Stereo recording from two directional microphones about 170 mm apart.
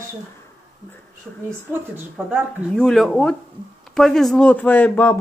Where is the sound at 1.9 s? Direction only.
5° right (ahead or behind).